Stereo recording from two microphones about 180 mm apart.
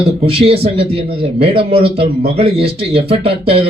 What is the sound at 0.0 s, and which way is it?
Speech, 35° right (ahead or behind).